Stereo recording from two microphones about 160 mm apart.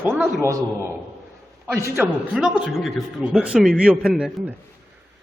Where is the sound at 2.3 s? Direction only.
5° right (ahead or behind).